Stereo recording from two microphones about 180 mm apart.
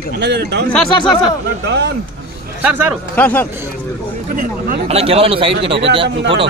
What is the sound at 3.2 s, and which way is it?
Speech, 10° left (ahead or behind).